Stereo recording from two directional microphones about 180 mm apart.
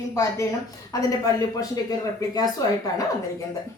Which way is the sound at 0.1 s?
15° left (ahead or behind).